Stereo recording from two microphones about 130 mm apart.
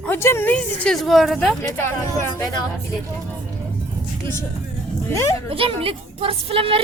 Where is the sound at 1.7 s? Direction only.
20° left (ahead or behind).